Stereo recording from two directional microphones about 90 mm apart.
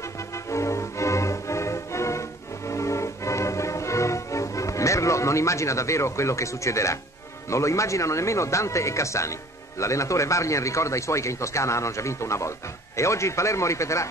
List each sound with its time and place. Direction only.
0.5 s music: 35° left (ahead or behind)
7.4 s speech: 35° left (ahead or behind)